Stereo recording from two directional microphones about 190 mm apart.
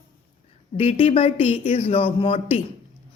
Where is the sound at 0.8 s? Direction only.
35° left (ahead or behind).